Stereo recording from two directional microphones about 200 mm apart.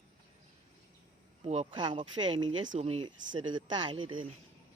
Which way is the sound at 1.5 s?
30° right (ahead or behind).